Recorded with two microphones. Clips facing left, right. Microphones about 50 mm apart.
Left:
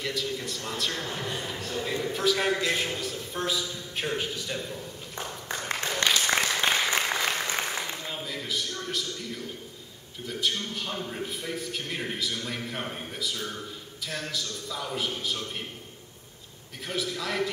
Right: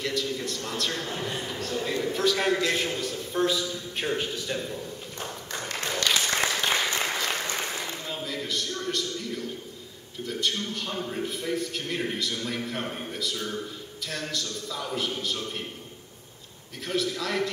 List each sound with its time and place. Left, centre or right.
0.0 s speech: centre
6.0 s applause: left
8.0 s a sound: centre
10.2 s speech: centre
16.8 s speech: centre